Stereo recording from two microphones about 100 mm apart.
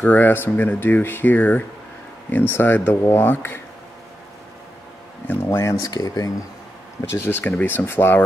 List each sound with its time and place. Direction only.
0.0 s speech: 15° left (ahead or behind)
5.3 s speech: 25° left (ahead or behind); by 6.3 s 40° left (ahead or behind)
7.1 s speech: 25° left (ahead or behind)